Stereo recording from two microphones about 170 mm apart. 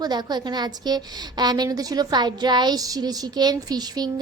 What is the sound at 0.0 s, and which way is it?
A woman's voice, 25° right (ahead or behind).